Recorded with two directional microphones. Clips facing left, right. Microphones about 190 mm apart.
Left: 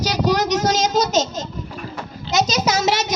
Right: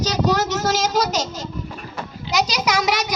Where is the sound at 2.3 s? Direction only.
25° left (ahead or behind).